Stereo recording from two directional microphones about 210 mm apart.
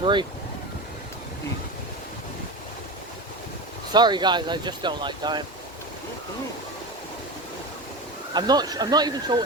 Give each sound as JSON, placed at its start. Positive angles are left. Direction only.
{"t": 0.0, "sound": "speech", "side_deg": -20}
{"t": 3.9, "sound": "speech", "side_deg": -20}
{"t": 8.3, "sound": "speech", "side_deg": -20}